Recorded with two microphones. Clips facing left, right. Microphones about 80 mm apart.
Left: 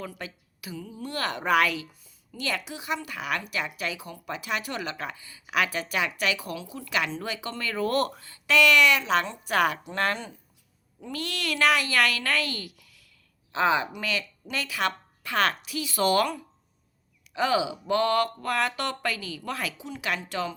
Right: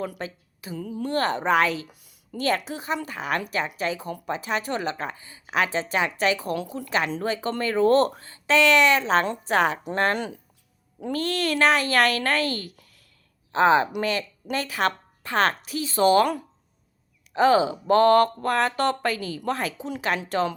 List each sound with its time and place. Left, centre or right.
0.2 s a woman's voice: right
0.8 s a woman's voice: right
1.9 s a sound: right
2.4 s a woman's voice: right
10.2 s speech: right
11.1 s a woman's voice: right
17.3 s a woman's voice: right